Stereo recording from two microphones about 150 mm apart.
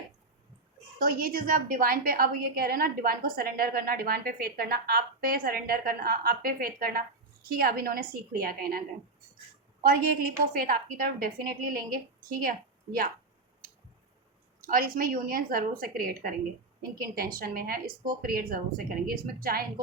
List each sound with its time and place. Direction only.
0.9 s a woman's voice: 80° right
7.4 s a woman's voice: 85° right
9.8 s a woman's voice: 75° right (ahead or behind)
14.6 s a woman's voice: 70° right (ahead or behind)